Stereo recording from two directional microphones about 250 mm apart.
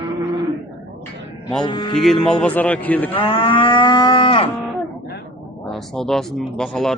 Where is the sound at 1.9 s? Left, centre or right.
Centre.